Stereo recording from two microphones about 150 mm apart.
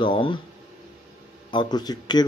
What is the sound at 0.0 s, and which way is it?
Speech, 35° left (ahead or behind).